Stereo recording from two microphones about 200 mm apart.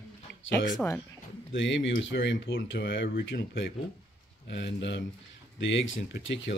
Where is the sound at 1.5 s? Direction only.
65° left (ahead or behind).